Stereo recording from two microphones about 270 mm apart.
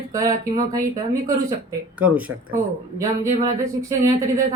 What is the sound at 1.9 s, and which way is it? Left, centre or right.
Speech, centre.